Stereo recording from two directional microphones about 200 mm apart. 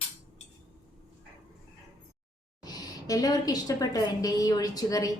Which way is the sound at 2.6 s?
20° left (ahead or behind).